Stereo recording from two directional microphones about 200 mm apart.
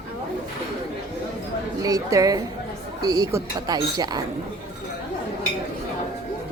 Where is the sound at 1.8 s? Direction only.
15° right (ahead or behind).